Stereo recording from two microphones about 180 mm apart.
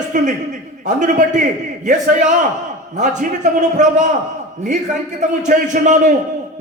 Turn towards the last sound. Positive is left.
turn(degrees=-45)  # may be behind; listen again after turning